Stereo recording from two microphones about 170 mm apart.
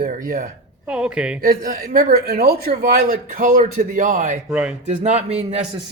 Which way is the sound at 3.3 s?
50° right (ahead or behind).